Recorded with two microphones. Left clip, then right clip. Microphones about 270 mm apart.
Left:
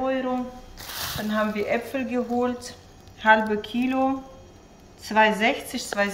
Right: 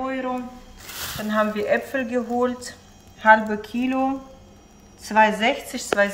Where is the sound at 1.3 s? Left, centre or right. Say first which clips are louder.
Right 4 dB; centre.